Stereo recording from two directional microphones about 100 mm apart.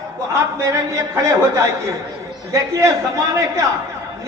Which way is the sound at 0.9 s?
35° right (ahead or behind).